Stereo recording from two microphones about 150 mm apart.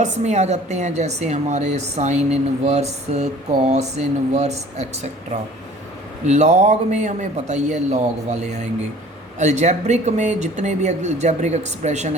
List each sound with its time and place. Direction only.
0.0 s speech: 50° right (ahead or behind)